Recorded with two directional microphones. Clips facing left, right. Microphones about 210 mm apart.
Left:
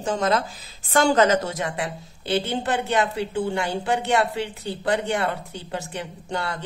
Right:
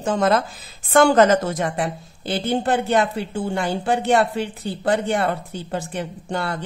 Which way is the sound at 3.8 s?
50° right (ahead or behind).